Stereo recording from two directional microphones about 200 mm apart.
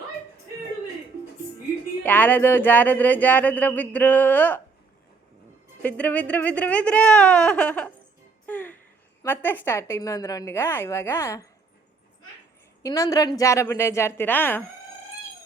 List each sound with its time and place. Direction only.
2.0 s speech: 10° left (ahead or behind)
5.8 s speech: 10° left (ahead or behind)
8.4 s music: 10° left (ahead or behind)
9.2 s speech: 10° left (ahead or behind)
12.8 s speech: 15° left (ahead or behind)